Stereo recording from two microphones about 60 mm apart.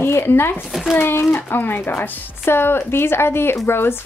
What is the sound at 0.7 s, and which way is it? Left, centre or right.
Speech, centre.